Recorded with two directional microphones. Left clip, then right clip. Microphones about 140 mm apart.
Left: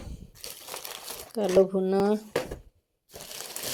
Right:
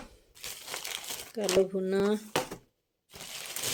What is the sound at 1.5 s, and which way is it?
Speech, 10° left (ahead or behind).